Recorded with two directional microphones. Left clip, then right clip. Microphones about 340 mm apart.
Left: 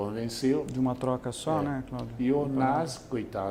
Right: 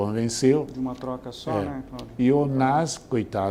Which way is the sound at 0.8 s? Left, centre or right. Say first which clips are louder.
Left 2 dB; left.